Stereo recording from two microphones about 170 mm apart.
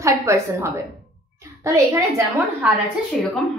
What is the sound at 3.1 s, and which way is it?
Speech, centre (ahead or behind).